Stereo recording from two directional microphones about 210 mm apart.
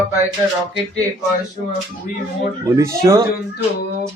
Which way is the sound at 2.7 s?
15° right (ahead or behind).